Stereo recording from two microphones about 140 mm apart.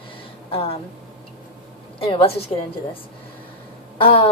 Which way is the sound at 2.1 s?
40° left (ahead or behind).